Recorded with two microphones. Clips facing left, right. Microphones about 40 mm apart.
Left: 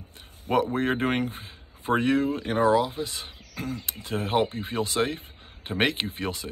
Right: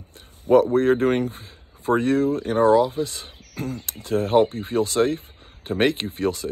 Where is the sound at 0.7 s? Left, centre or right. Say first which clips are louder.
Right 7 dB; left.